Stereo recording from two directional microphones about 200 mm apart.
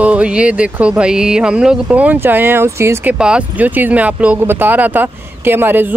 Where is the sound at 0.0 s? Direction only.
5° right (ahead or behind).